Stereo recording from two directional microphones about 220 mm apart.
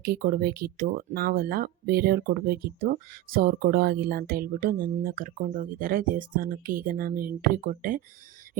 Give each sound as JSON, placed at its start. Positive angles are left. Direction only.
{"t": 0.0, "sound": "speech", "side_deg": -45}